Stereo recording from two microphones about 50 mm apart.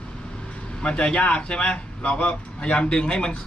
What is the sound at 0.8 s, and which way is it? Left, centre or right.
Speech, left.